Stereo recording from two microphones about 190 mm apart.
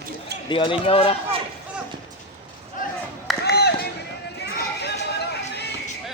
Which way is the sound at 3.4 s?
60° left (ahead or behind).